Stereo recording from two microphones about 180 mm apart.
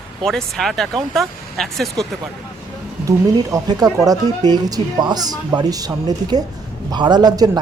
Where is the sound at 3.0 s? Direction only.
20° right (ahead or behind).